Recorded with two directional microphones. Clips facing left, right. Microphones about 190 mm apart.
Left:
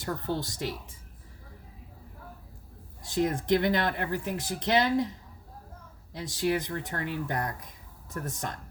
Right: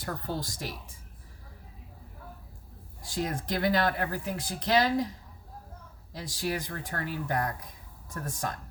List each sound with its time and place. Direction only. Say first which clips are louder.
0.0 s speech: left 3 dB; 20° left (ahead or behind)
3.0 s speech: left 5 dB; 20° left (ahead or behind)
6.1 s speech: left 4 dB; 20° left (ahead or behind)